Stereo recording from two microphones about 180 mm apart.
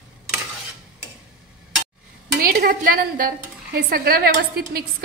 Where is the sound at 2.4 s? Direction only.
55° right (ahead or behind).